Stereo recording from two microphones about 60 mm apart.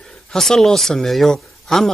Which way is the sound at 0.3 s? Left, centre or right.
Centre.